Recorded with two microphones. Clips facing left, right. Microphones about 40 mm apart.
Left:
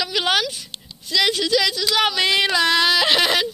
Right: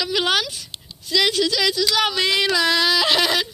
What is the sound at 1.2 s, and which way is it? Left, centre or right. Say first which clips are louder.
Speech: left 4 dB; centre.